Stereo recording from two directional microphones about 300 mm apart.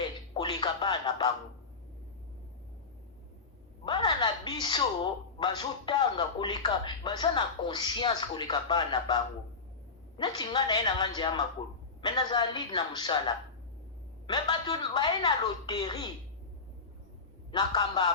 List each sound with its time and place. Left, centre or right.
0.3 s music: centre
3.8 s a sound: centre
5.4 s speech: centre
10.2 s speech: centre
17.5 s speech: centre